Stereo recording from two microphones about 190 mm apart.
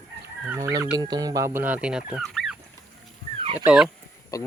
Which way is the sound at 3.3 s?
25° right (ahead or behind).